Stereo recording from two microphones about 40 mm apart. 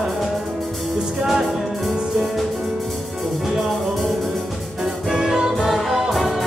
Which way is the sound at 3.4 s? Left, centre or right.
Centre.